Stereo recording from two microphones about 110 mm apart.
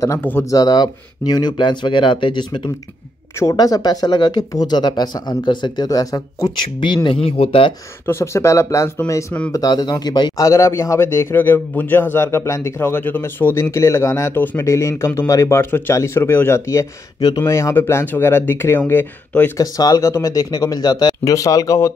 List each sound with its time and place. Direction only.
0.2 s speech: 20° left (ahead or behind)
0.5 s speech: 35° left (ahead or behind)
3.3 s speech: 30° left (ahead or behind)
7.2 s speech: 65° left (ahead or behind)
8.1 s a man's voice: 25° left (ahead or behind)
9.5 s a man's voice: 35° left (ahead or behind); by 19.6 s 20° left (ahead or behind)
19.6 s speech: 35° left (ahead or behind)